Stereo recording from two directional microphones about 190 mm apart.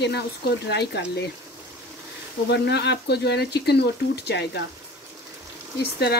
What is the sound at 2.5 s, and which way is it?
Speech, 60° left (ahead or behind).